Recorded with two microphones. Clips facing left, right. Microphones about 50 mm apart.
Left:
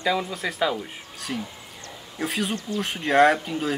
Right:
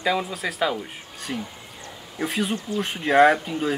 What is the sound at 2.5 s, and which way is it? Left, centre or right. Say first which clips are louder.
Speech: right 1 dB; centre.